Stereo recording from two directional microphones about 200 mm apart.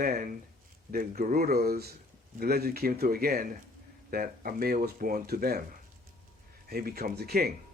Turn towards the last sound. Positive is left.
turn(degrees=-50)  # may be behind; listen again after turning